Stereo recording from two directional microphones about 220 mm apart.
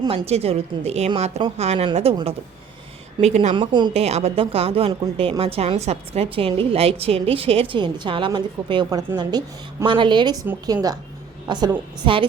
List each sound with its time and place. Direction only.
0.0 s speech: 20° right (ahead or behind)